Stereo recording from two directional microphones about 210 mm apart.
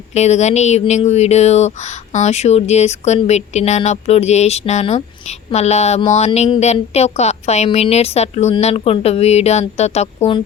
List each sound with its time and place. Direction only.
0.1 s a woman's voice: 30° left (ahead or behind)